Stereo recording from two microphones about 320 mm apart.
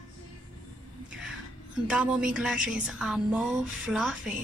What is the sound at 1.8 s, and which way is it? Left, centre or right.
Speech, centre.